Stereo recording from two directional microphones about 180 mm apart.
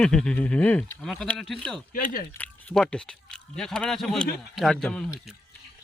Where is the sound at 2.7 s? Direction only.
5° left (ahead or behind).